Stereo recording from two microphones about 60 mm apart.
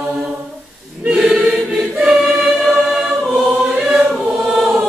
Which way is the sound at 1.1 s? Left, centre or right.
Centre.